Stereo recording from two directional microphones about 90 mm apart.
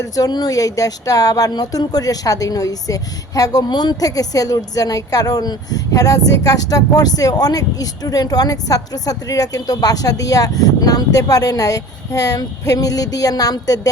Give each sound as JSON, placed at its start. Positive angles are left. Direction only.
{"t": 0.0, "sound": "speech", "side_deg": 45}